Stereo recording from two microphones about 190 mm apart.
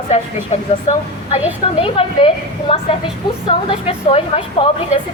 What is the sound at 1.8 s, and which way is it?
A woman's voice, 30° left (ahead or behind).